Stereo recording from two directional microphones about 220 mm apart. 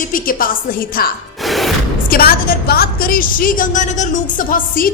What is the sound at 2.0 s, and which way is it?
A woman's voice, 40° left (ahead or behind).